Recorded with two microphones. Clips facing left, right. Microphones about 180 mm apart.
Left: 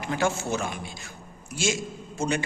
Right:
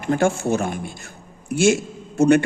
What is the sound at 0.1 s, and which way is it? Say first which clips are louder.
Speech: right 8 dB; 55° right (ahead or behind).